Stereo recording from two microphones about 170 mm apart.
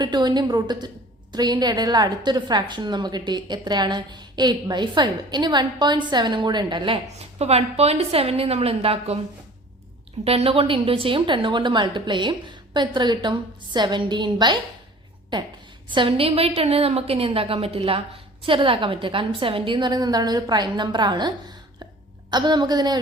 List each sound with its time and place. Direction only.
0.0 s a woman's voice: 25° right (ahead or behind)
10.2 s a woman's voice: 35° right (ahead or behind)